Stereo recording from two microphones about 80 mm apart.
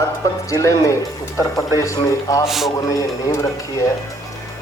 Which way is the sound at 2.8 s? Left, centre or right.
Left.